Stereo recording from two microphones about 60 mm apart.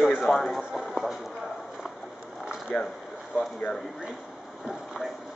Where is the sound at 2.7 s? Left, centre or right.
Centre.